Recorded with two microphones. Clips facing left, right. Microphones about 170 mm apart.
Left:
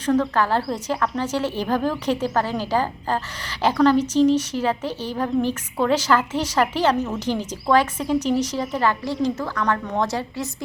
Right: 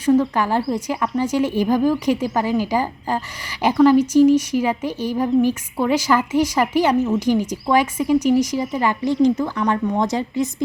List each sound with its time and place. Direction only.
0.0 s a woman's voice: 10° right (ahead or behind)
6.9 s speech: centre (ahead or behind)
7.2 s a woman's voice: 10° right (ahead or behind)
8.0 s a woman's voice: centre (ahead or behind); by 10.5 s 20° right (ahead or behind)